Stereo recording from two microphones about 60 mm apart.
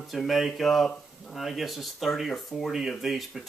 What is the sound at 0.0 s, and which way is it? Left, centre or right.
Speech, centre.